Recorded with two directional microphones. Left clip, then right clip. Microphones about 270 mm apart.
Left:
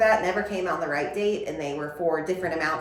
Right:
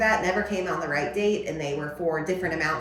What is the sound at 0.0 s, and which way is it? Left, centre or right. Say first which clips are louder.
Speech: left 2 dB; centre.